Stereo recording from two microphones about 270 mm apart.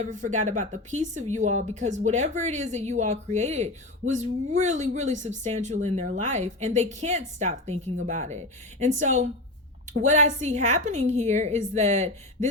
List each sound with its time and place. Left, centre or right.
0.0 s speech: right